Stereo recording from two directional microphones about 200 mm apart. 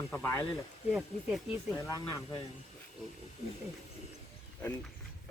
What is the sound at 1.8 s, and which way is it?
Speech, 15° left (ahead or behind).